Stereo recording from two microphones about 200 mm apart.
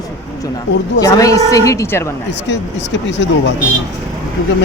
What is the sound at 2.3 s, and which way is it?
Speech, 60° left (ahead or behind).